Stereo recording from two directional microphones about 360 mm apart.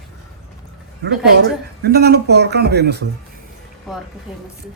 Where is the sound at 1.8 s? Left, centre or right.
Right.